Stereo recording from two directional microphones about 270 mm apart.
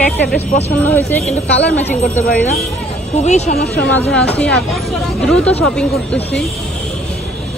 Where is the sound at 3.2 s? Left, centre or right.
Left.